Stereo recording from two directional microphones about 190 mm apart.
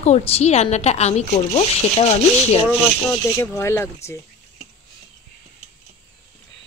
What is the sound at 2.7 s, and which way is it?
Speech, 10° left (ahead or behind).